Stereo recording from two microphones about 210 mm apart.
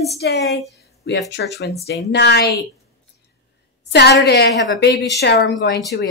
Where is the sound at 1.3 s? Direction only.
50° left (ahead or behind).